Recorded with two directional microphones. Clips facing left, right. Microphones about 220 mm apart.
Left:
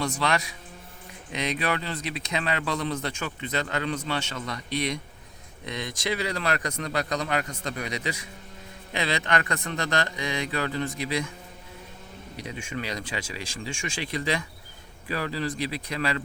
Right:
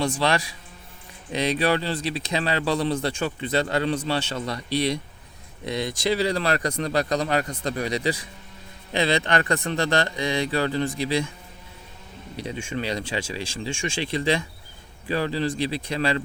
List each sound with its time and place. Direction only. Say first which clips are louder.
0.0 s speech: right 4 dB; 30° right (ahead or behind)
12.4 s speech: right 5 dB; 30° right (ahead or behind)